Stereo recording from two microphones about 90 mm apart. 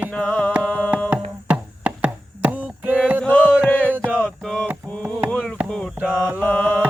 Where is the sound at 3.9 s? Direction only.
20° right (ahead or behind).